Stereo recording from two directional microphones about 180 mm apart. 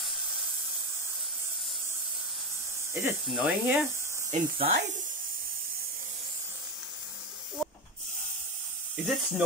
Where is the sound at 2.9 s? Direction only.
15° right (ahead or behind).